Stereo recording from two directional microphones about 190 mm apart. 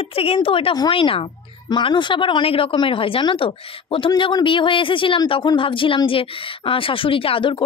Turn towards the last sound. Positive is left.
turn(degrees=30)  # may be behind; listen again after turning